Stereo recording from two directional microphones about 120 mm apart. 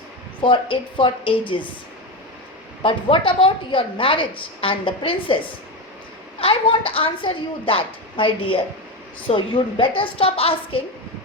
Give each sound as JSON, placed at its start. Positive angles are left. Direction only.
{"t": 0.4, "sound": "a woman's voice", "side_deg": 45}
{"t": 2.8, "sound": "a woman's voice", "side_deg": 45}
{"t": 6.4, "sound": "a woman's voice", "side_deg": 50}